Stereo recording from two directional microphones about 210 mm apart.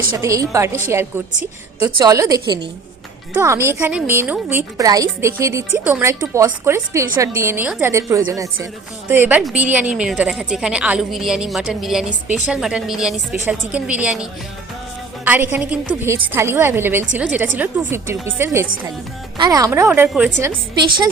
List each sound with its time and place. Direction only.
0.2 s a woman's voice: 15° right (ahead or behind)
20.5 s a woman's voice: 20° right (ahead or behind)